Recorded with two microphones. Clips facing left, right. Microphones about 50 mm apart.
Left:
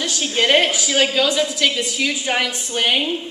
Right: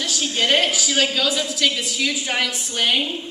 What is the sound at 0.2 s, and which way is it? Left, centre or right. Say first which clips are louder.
A woman's voice: left 3 dB; left.